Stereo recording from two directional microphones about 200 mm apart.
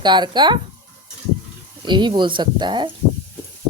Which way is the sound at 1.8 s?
20° right (ahead or behind).